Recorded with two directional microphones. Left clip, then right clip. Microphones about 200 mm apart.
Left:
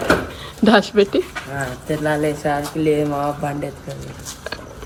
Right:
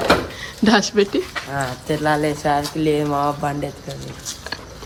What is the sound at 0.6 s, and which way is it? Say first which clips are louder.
Speech: left 2 dB; 15° right (ahead or behind).